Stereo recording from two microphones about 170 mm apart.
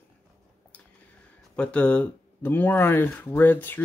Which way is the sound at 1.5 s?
5° left (ahead or behind).